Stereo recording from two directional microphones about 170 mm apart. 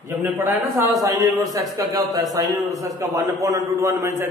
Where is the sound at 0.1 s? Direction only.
10° right (ahead or behind).